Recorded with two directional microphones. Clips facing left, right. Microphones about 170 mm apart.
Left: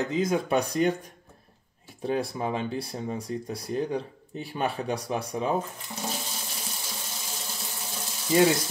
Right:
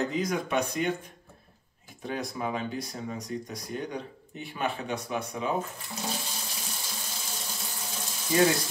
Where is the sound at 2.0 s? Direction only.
30° left (ahead or behind).